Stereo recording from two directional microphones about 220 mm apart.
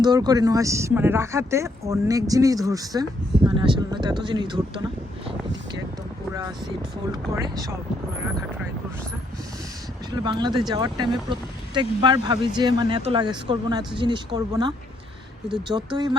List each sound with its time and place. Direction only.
0.0 s speech: 20° right (ahead or behind)
7.1 s speech: 15° right (ahead or behind)
10.2 s speech: 20° right (ahead or behind)
15.7 s speech: 15° right (ahead or behind)